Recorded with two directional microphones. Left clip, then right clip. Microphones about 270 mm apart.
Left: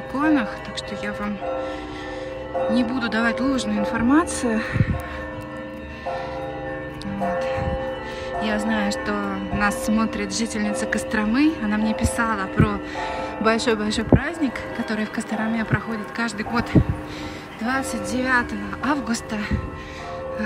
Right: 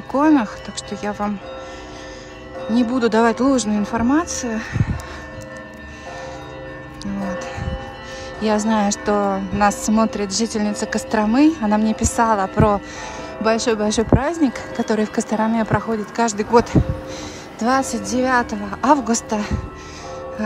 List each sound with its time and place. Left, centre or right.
0.2 s a woman's voice: centre
2.7 s a woman's voice: centre
8.5 s a woman's voice: centre